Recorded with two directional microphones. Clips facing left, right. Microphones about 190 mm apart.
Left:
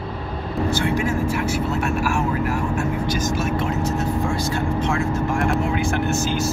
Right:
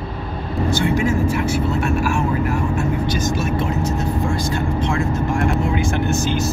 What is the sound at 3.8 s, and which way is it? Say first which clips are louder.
Vehicle: right 1 dB; 5° left (ahead or behind).